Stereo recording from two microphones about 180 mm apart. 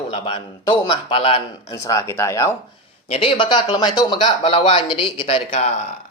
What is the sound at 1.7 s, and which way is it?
Speech, 15° left (ahead or behind).